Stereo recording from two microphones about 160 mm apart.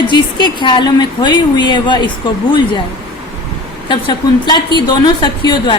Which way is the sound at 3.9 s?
30° left (ahead or behind).